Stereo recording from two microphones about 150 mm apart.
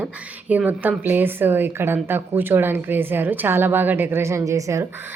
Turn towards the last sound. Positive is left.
turn(degrees=-20)  # may be behind; listen again after turning